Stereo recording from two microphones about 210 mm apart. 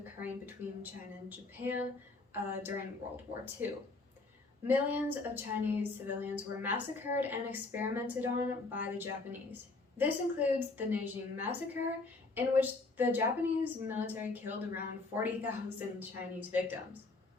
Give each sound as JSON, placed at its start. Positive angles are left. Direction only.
{"t": 0.0, "sound": "a woman's voice", "side_deg": -10}
{"t": 4.6, "sound": "a woman's voice", "side_deg": -10}